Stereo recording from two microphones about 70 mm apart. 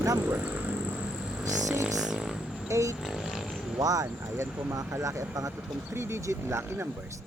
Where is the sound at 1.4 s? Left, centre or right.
Right.